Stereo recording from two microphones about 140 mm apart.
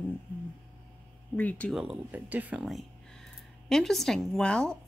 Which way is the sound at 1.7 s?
10° right (ahead or behind).